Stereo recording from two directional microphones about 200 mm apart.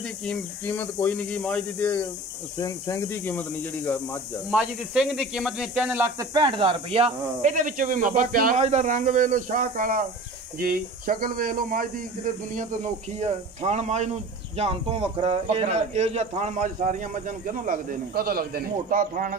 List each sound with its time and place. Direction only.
0.2 s speech: 5° left (ahead or behind)
4.5 s speech: 5° right (ahead or behind)
6.3 s a man's voice: 25° right (ahead or behind); by 19.3 s 45° right (ahead or behind)